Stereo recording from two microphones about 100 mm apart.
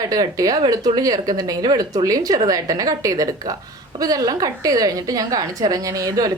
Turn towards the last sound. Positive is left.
turn(degrees=-40)  # may be behind; listen again after turning